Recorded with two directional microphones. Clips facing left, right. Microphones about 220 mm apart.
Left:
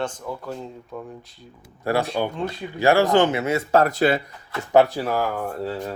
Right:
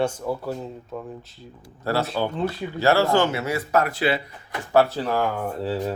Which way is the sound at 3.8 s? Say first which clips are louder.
Left 4 dB; 45° left (ahead or behind).